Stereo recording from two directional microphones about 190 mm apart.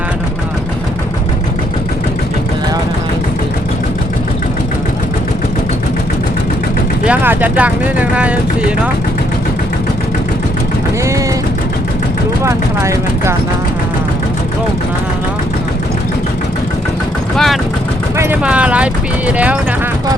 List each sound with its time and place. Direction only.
7.0 s speech: 10° right (ahead or behind)
12.5 s speech: 15° right (ahead or behind)
17.3 s speech: centre (ahead or behind)